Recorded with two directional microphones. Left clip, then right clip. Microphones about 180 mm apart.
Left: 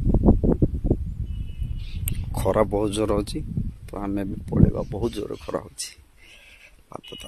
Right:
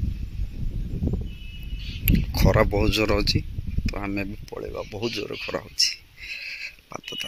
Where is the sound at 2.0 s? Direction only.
20° left (ahead or behind).